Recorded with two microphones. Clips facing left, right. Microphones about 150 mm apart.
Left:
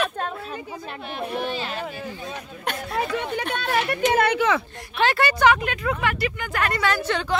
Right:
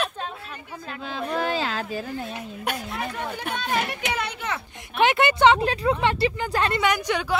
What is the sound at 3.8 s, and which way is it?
Speech, 55° left (ahead or behind).